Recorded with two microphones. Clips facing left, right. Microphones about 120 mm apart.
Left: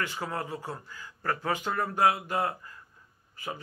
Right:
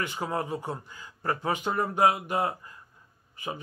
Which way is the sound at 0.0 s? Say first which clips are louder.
Right 3 dB; 20° right (ahead or behind).